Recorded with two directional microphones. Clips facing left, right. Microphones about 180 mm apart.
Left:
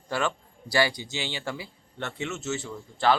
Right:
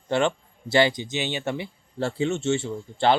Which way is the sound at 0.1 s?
25° right (ahead or behind).